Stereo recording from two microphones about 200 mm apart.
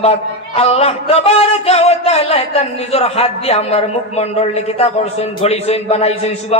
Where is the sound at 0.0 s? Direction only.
30° left (ahead or behind).